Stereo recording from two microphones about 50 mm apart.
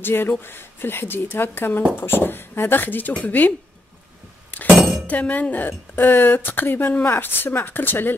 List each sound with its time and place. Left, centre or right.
0.0 s speech: left
2.0 s speech: left
5.0 s a woman's voice: left